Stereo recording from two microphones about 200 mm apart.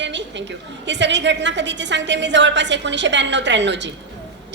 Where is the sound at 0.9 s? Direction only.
60° right (ahead or behind).